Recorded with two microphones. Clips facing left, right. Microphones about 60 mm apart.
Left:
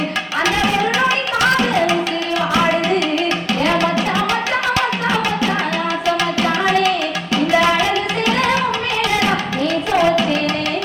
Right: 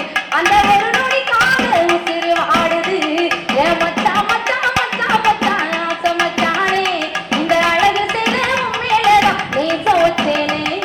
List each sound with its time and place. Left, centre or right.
0.4 s music: right